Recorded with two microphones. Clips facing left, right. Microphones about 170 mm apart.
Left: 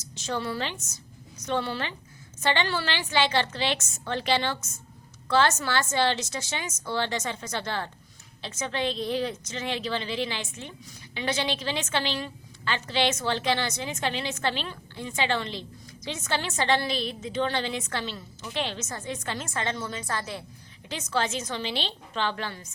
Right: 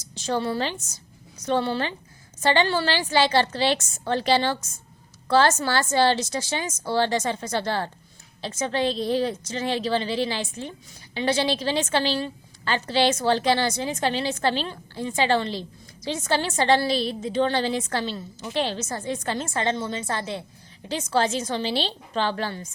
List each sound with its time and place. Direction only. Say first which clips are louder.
0.1 s a woman's voice: right 5 dB; 30° right (ahead or behind)